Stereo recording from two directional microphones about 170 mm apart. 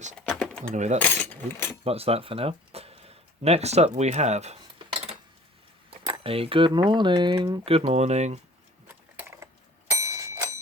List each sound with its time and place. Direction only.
0.3 s a sound: 5° left (ahead or behind)
0.7 s speech: 45° right (ahead or behind)
0.9 s speech: 10° left (ahead or behind)
1.8 s speech: 35° right (ahead or behind)
8.9 s a sound: 10° right (ahead or behind)
9.9 s clock: 15° right (ahead or behind)